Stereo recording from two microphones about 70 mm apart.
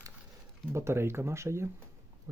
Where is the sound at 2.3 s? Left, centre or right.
Right.